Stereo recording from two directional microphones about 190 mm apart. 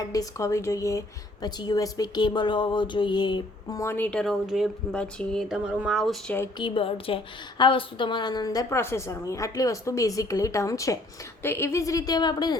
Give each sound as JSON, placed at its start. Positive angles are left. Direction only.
{"t": 0.1, "sound": "speech", "side_deg": 15}
{"t": 6.6, "sound": "a woman's voice", "side_deg": 25}